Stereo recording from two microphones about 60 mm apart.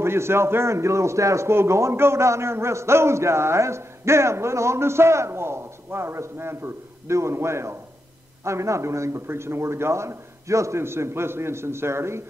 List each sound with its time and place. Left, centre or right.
0.0 s a man's voice: right